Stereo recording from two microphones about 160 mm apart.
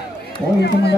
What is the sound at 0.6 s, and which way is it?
Speech, 90° left.